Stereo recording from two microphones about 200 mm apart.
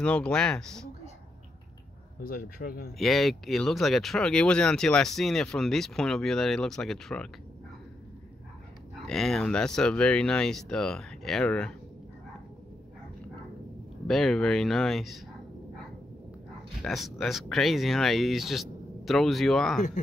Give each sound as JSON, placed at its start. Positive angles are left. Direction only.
{"t": 0.0, "sound": "speech", "side_deg": 5}
{"t": 2.2, "sound": "speech", "side_deg": 50}
{"t": 3.0, "sound": "speech", "side_deg": 0}
{"t": 9.0, "sound": "speech", "side_deg": 0}
{"t": 14.0, "sound": "speech", "side_deg": 0}
{"t": 16.8, "sound": "speech", "side_deg": 0}